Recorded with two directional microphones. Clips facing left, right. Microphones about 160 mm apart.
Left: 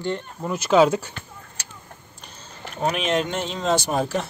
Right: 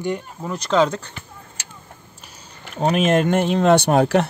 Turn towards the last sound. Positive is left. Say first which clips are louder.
# right 7 dB
turn(degrees=-70)  # may be behind; listen again after turning